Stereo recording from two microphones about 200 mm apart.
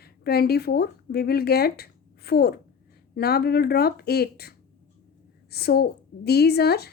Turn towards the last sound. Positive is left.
turn(degrees=55)  # may be behind; listen again after turning